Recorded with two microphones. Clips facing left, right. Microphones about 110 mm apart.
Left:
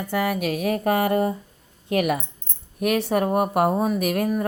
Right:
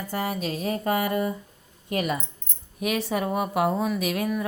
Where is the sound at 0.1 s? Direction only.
65° left (ahead or behind).